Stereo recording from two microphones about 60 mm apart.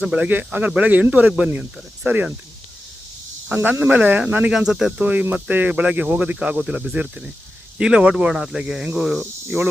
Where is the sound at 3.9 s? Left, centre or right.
Right.